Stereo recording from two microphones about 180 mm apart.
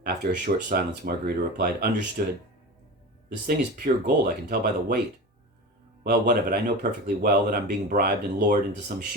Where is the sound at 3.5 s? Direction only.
55° right (ahead or behind).